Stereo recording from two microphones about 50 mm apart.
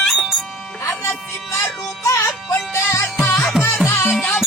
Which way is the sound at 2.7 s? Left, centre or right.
Left.